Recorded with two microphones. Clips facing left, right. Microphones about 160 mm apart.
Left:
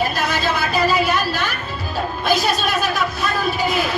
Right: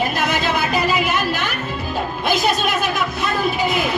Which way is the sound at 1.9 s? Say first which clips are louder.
Left 2 dB; 20° right (ahead or behind).